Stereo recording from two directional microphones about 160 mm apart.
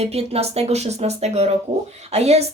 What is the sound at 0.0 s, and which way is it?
A woman's voice, 40° right (ahead or behind).